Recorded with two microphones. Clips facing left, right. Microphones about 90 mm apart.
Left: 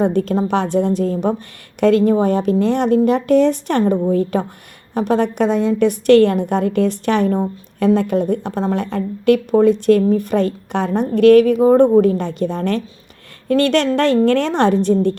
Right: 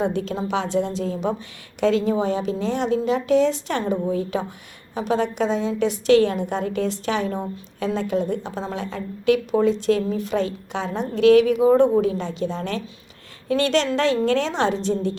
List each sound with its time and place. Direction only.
0.0 s a woman's voice: 50° left (ahead or behind)
11.5 s a woman's voice: 45° left (ahead or behind)